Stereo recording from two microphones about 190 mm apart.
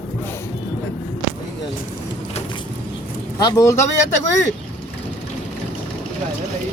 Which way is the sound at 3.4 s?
15° left (ahead or behind).